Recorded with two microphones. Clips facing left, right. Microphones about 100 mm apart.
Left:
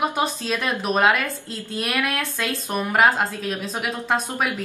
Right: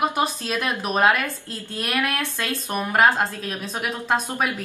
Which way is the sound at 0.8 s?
Centre (ahead or behind).